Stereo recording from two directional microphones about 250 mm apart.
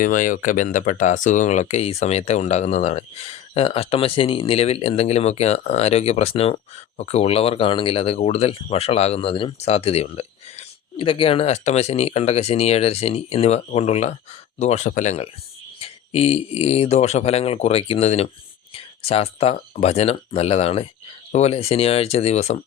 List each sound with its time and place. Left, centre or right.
0.0 s speech: left